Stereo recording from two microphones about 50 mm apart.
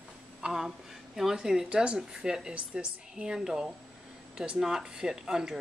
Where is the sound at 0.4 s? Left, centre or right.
Centre.